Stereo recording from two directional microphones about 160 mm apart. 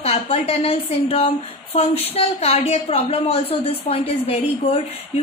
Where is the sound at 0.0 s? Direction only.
40° left (ahead or behind).